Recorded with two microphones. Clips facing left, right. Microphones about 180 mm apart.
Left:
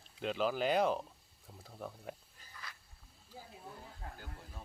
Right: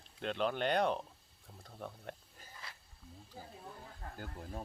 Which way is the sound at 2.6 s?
25° right (ahead or behind).